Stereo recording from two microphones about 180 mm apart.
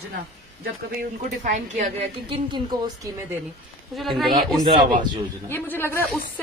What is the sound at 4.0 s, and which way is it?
Speech, centre (ahead or behind).